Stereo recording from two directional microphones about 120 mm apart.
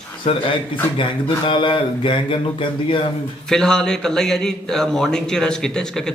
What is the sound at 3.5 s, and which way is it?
A man's voice, 5° left (ahead or behind).